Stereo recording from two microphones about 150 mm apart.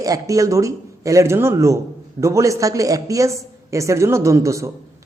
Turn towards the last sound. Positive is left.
turn(degrees=-20)  # may be behind; listen again after turning